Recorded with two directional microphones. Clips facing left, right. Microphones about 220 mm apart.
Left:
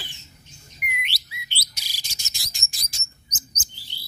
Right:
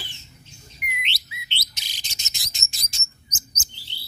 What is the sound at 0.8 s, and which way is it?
Bird, 20° right (ahead or behind).